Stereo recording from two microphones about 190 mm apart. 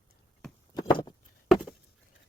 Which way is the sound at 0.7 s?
20° left (ahead or behind).